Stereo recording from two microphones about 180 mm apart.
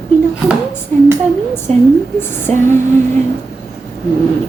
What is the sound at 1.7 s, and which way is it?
Speech, 35° right (ahead or behind).